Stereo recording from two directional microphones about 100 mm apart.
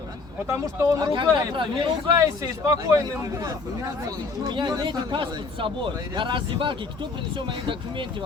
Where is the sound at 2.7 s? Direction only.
35° right (ahead or behind); by 8.0 s 55° right (ahead or behind).